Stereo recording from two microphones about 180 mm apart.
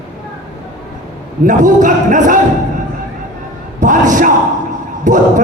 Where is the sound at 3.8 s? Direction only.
45° right (ahead or behind).